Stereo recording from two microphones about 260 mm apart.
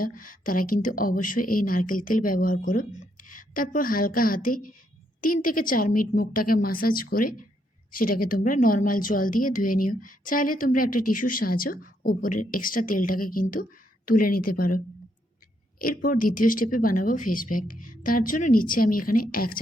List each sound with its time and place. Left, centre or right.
0.0 s a woman's voice: left
15.8 s a woman's voice: left